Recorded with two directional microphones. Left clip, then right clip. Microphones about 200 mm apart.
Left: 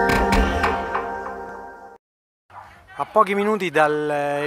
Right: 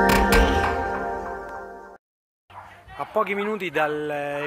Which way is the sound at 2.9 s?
40° left (ahead or behind).